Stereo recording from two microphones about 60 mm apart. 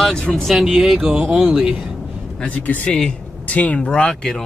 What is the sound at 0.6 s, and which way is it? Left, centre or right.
Speech, centre.